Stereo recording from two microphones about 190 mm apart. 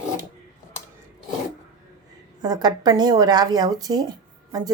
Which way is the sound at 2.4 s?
20° right (ahead or behind).